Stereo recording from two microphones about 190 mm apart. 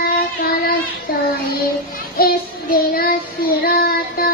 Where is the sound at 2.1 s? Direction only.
50° left (ahead or behind).